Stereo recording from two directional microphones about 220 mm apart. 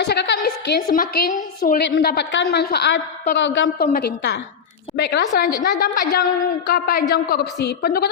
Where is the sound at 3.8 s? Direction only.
40° left (ahead or behind).